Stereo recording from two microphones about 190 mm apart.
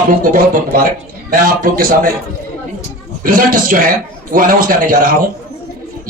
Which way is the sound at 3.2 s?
45° right (ahead or behind).